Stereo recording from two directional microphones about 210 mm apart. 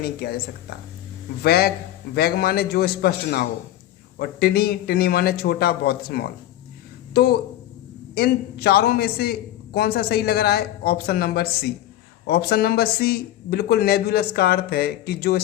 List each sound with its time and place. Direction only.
0.0 s a man's voice: 50° left (ahead or behind)